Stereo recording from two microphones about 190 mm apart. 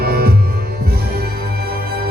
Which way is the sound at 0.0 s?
55° right (ahead or behind).